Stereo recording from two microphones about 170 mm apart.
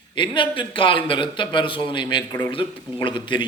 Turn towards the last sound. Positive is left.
turn(degrees=30)  # may be behind; listen again after turning